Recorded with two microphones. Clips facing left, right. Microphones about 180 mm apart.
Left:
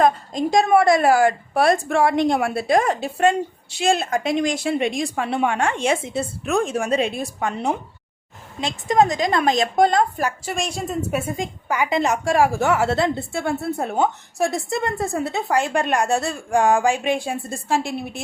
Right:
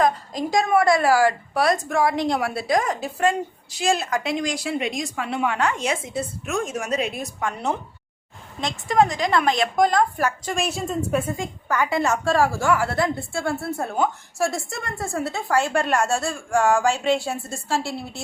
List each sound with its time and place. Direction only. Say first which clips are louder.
0.0 s a woman's voice: left 3 dB; 25° left (ahead or behind)
2.0 s a woman's voice: left 3 dB; 55° left (ahead or behind)
2.9 s a woman's voice: left 3 dB; 25° left (ahead or behind)
10.5 s a woman's voice: even; centre (ahead or behind)
11.3 s a woman's voice: left 1 dB; 15° left (ahead or behind)